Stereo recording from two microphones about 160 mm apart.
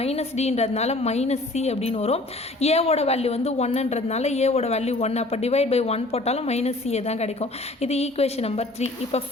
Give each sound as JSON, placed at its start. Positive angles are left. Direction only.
{"t": 0.0, "sound": "a woman's voice", "side_deg": 40}